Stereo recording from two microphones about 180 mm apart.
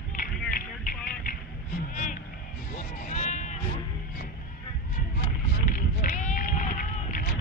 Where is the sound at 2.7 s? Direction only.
40° left (ahead or behind).